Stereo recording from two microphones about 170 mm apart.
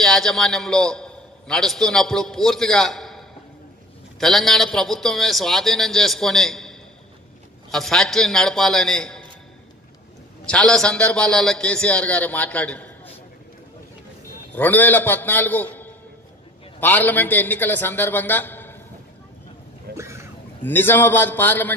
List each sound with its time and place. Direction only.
0.0 s a man's voice: centre (ahead or behind)
10.4 s a man's voice: 5° left (ahead or behind)
14.5 s a man's voice: 10° left (ahead or behind)
19.9 s a sound: 15° right (ahead or behind)
20.6 s a man's voice: 10° left (ahead or behind)